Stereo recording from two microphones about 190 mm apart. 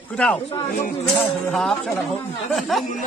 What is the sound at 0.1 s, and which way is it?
Speech, 5° left (ahead or behind).